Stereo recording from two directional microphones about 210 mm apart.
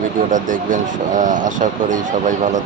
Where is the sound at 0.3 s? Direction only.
40° right (ahead or behind).